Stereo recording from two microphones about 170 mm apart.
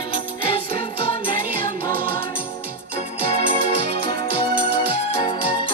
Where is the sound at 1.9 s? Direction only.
10° left (ahead or behind).